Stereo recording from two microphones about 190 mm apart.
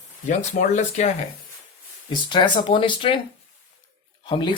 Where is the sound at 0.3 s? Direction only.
40° left (ahead or behind).